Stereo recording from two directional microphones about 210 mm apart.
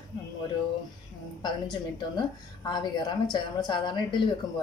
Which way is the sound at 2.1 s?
20° left (ahead or behind).